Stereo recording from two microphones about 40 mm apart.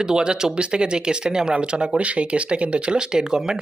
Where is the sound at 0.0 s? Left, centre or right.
Centre.